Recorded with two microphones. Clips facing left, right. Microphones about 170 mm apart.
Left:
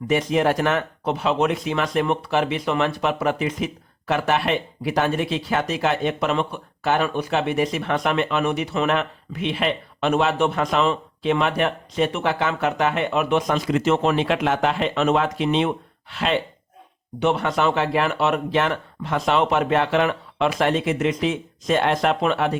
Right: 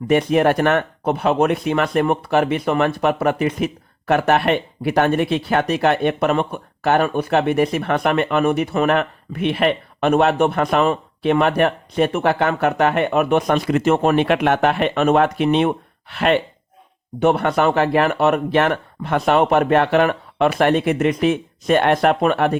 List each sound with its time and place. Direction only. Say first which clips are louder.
0.1 s speech: right 4 dB; 60° right (ahead or behind)